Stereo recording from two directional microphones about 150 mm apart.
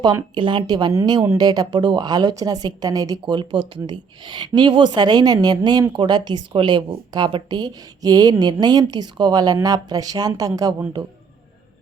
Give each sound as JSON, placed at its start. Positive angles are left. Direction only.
{"t": 0.3, "sound": "a woman's voice", "side_deg": -35}